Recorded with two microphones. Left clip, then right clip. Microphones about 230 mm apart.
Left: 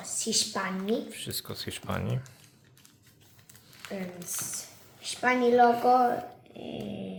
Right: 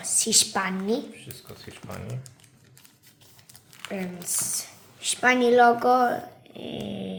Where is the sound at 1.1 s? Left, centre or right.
Left.